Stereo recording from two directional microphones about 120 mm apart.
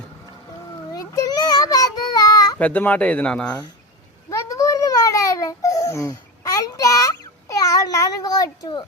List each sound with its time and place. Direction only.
0.9 s child singing: 30° left (ahead or behind)
2.6 s speech: 15° left (ahead or behind)
4.3 s babbling: 25° left (ahead or behind)